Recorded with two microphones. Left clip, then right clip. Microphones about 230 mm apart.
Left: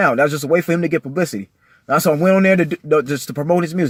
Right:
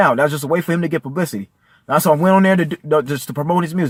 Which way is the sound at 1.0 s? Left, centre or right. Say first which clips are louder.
Left 2 dB; right.